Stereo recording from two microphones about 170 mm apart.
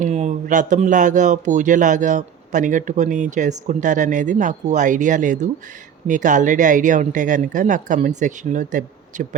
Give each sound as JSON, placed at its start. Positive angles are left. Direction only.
{"t": 0.0, "sound": "a man's voice", "side_deg": -45}